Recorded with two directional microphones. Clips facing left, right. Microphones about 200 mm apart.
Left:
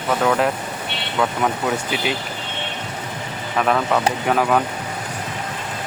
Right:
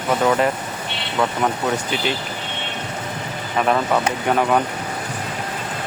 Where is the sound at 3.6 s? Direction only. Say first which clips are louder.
Even; 5° right (ahead or behind).